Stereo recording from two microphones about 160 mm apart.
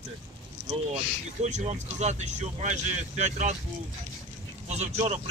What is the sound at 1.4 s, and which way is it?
Speech, 45° right (ahead or behind).